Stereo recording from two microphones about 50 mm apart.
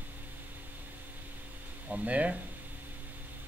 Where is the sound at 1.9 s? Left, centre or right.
Right.